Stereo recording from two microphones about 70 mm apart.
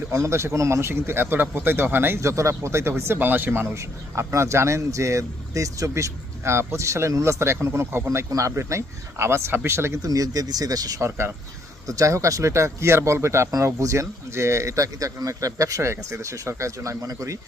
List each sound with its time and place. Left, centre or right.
0.1 s speech: right
2.2 s speech: right
3.8 s speech: right
8.3 s speech: right
10.0 s speech: right
11.9 s speech: right